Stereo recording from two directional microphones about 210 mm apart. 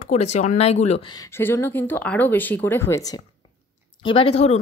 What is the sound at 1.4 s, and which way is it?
Speech, 10° left (ahead or behind).